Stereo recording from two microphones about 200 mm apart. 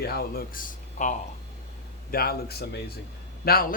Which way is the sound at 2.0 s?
50° left (ahead or behind).